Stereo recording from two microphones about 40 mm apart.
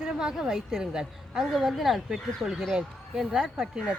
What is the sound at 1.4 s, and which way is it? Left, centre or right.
Speech, centre.